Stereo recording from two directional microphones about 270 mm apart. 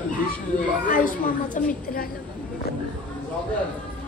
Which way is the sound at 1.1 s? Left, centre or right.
Left.